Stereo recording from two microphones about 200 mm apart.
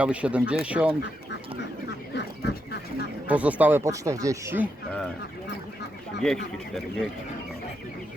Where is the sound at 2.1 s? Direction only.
60° left (ahead or behind).